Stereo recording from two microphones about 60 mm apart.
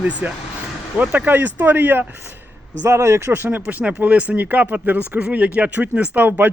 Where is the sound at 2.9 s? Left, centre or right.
Right.